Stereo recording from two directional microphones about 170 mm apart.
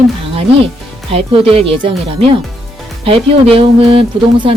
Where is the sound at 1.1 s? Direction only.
35° right (ahead or behind).